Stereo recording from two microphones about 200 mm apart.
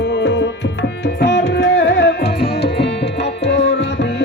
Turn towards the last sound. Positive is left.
turn(degrees=60)  # may be behind; listen again after turning